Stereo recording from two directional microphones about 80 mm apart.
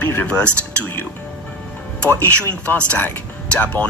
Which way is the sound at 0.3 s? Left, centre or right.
Centre.